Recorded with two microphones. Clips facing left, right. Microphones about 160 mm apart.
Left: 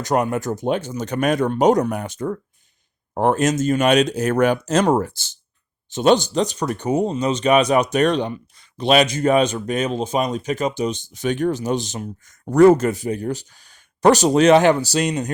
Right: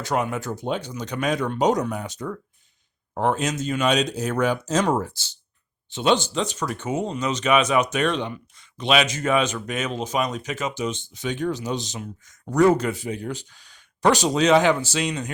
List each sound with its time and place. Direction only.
0.0 s speech: 45° left (ahead or behind)
3.8 s speech: 55° left (ahead or behind)
14.8 s speech: 40° left (ahead or behind)